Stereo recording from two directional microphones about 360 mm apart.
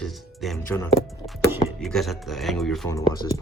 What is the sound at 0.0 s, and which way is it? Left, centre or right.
Music, centre.